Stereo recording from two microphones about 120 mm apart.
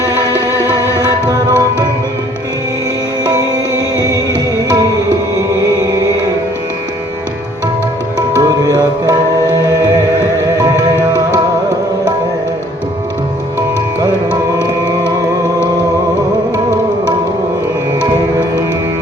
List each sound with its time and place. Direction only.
0.7 s music: 30° right (ahead or behind)
8.4 s music: 30° right (ahead or behind)
14.6 s music: 35° right (ahead or behind)